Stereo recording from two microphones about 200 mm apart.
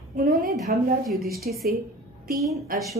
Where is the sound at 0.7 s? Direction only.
45° right (ahead or behind).